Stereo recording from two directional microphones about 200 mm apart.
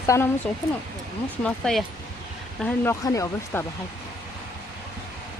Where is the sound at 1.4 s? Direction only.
Centre (ahead or behind).